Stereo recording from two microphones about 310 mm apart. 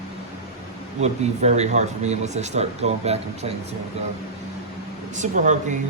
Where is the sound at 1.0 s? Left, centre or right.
Right.